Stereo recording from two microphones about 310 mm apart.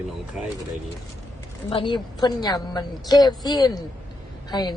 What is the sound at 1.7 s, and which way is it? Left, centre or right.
A woman's voice, centre.